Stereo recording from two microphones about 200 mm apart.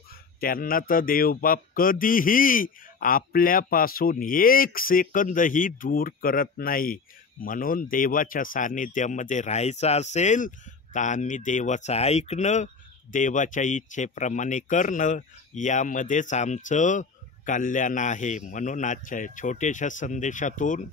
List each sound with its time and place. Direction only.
0.4 s a man's voice: 45° left (ahead or behind)